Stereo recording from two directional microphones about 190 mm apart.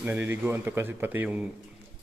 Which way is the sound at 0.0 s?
10° right (ahead or behind).